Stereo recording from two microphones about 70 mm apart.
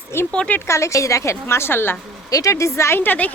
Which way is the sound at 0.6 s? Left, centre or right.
Left.